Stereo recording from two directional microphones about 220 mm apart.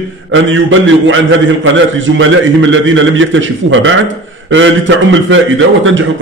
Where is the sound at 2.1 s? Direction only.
60° right (ahead or behind).